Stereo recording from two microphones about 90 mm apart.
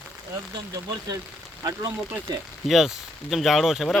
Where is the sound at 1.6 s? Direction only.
45° right (ahead or behind).